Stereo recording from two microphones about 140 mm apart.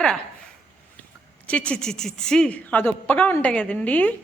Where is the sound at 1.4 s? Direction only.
10° left (ahead or behind).